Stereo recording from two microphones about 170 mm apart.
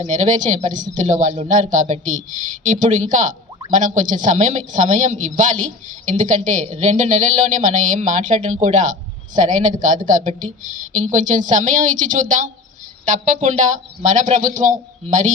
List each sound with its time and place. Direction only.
0.1 s speech: 45° right (ahead or behind)